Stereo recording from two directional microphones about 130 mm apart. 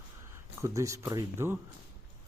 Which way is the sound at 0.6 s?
25° right (ahead or behind).